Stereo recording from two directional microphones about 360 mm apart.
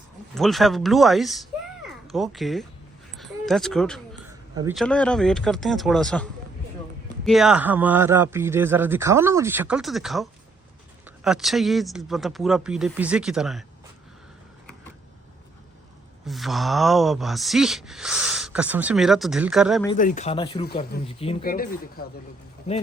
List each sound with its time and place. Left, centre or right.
0.3 s speech: centre
7.3 s speech: centre
16.2 s speech: centre
19.9 s speech: left